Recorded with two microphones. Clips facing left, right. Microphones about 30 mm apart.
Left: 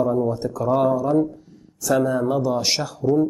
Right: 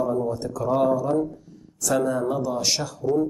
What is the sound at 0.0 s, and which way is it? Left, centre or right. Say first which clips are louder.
A woman's voice: left 4 dB; centre.